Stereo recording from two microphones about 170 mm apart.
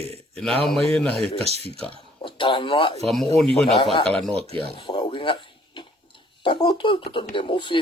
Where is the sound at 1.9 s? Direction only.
30° left (ahead or behind).